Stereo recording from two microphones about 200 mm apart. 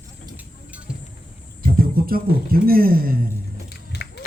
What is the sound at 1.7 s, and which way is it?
Speech, 45° right (ahead or behind).